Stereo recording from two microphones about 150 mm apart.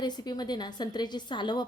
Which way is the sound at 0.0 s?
30° left (ahead or behind).